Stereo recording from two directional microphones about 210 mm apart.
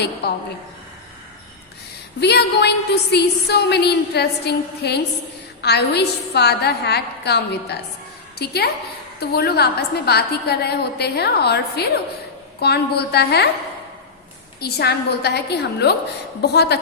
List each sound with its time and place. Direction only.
2.2 s a woman's voice: 50° left (ahead or behind)
14.6 s a woman's voice: 50° left (ahead or behind)